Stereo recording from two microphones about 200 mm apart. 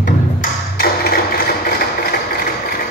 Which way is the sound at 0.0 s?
45° left (ahead or behind).